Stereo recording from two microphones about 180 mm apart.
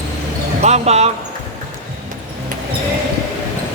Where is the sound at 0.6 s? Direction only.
35° right (ahead or behind).